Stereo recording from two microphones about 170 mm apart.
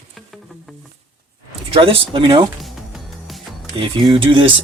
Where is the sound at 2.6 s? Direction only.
Centre (ahead or behind).